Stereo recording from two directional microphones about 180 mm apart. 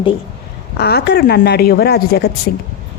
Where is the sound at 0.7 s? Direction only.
60° left (ahead or behind).